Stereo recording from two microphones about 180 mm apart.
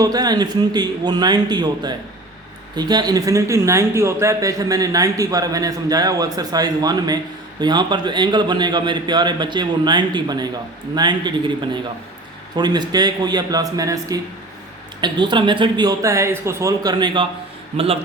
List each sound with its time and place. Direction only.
0.0 s speech: 20° right (ahead or behind)
17.7 s a man's voice: 35° right (ahead or behind)